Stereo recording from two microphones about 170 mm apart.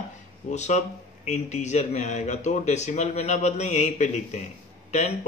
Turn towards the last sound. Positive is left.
turn(degrees=40)  # may be behind; listen again after turning